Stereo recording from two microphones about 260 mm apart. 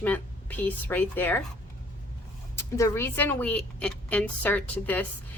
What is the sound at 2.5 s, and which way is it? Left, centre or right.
A woman's voice, centre.